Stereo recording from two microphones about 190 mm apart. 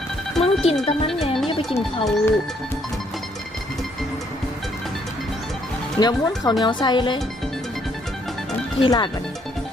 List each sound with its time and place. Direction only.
0.4 s speech: 30° left (ahead or behind)
0.9 s music: 30° left (ahead or behind)
1.8 s speech: centre (ahead or behind)
6.0 s speech: 20° left (ahead or behind)
8.8 s speech: 25° left (ahead or behind)